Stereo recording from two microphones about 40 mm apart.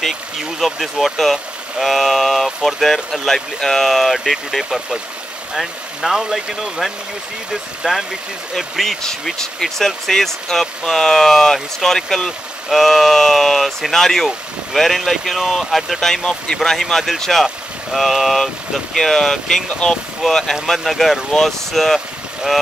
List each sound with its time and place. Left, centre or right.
0.6 s speech: centre
8.5 s speech: centre
16.0 s speech: centre
18.9 s speech: centre